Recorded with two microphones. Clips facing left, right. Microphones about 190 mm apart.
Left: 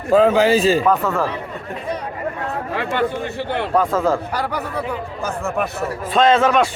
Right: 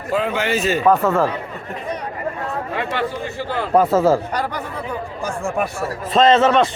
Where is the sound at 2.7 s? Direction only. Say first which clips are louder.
Left 4 dB; 60° left (ahead or behind).